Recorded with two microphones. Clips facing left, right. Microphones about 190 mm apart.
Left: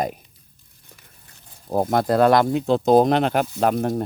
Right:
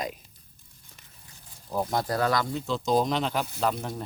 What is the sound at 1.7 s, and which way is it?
Speech, 55° left (ahead or behind).